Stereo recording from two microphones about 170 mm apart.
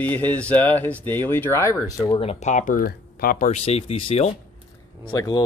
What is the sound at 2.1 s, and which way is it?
Speech, 40° left (ahead or behind).